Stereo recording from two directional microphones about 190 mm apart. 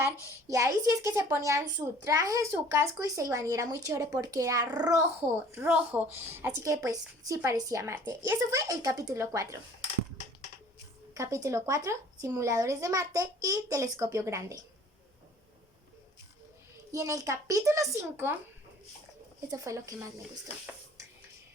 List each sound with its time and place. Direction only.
0.3 s a woman's voice: 15° right (ahead or behind)
11.1 s a woman's voice: 15° right (ahead or behind)
16.9 s a woman's voice: 15° right (ahead or behind)
19.5 s a woman's voice: 15° right (ahead or behind)